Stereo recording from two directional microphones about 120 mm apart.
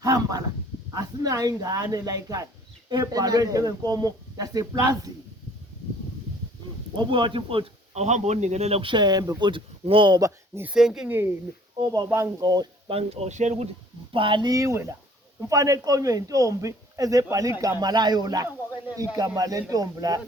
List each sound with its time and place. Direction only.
0.0 s a sound: 30° right (ahead or behind)
0.9 s a man's voice: 30° right (ahead or behind)
6.9 s speech: 40° right (ahead or behind)
7.9 s speech: 70° right (ahead or behind); by 9.3 s 35° right (ahead or behind)
9.4 s speech: 45° right (ahead or behind)
10.2 s speech: 25° right (ahead or behind)
10.6 s speech: 5° right (ahead or behind)
11.8 s a man's voice: 30° right (ahead or behind)
12.9 s speech: 60° right (ahead or behind); by 13.7 s 75° right (ahead or behind)
14.1 s speech: 45° right (ahead or behind)
14.5 s a man's voice: 25° right (ahead or behind)